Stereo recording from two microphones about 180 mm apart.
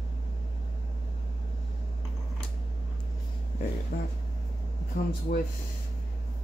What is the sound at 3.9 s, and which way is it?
Speech, 50° left (ahead or behind).